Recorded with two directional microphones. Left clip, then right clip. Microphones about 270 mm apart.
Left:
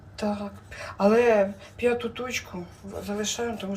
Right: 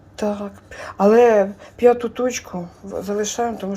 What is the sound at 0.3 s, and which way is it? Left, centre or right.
Speech, right.